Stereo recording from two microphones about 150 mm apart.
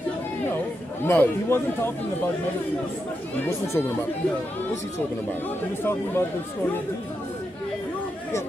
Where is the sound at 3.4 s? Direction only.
20° left (ahead or behind).